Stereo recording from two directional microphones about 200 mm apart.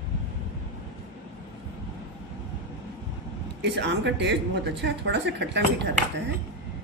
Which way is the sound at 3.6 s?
60° right (ahead or behind).